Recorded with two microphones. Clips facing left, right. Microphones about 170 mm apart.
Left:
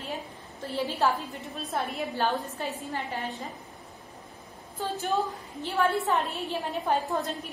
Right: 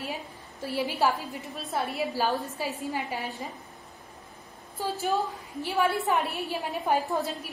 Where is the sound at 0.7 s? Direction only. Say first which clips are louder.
Right 1 dB; 10° right (ahead or behind).